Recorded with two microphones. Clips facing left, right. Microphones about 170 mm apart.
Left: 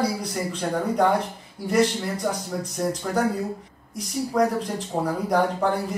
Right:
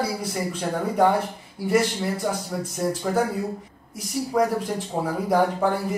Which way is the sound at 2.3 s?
5° right (ahead or behind).